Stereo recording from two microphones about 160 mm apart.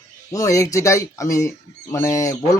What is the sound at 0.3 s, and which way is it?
Speech, 20° left (ahead or behind).